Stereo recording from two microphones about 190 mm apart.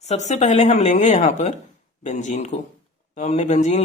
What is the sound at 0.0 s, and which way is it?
Speech, 35° left (ahead or behind).